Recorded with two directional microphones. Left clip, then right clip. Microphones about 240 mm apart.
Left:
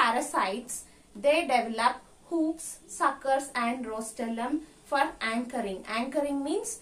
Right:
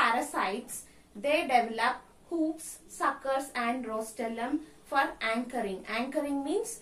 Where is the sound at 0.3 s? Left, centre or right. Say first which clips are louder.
Left 3 dB; centre.